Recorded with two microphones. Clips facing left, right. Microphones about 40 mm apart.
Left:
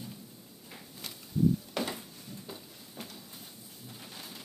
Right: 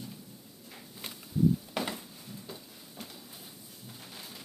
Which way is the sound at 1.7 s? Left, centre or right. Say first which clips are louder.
Even; centre.